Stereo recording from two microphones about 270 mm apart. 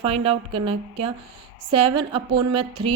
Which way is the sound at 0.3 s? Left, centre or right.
Right.